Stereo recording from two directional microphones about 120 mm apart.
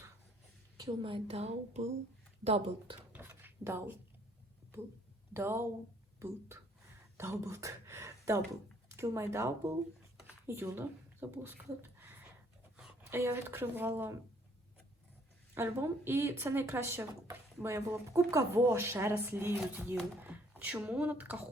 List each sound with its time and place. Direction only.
1.0 s speech: 50° right (ahead or behind)
3.1 s dishes: 15° right (ahead or behind)
5.3 s speech: 20° right (ahead or behind)
7.2 s a sound: 25° right (ahead or behind)
8.9 s speech: 25° right (ahead or behind)
15.5 s speech: 20° right (ahead or behind)